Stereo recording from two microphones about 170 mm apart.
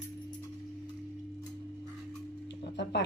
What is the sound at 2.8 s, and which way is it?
Speech, 90° left.